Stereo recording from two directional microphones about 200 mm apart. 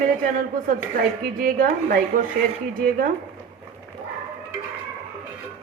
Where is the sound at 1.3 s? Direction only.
45° right (ahead or behind).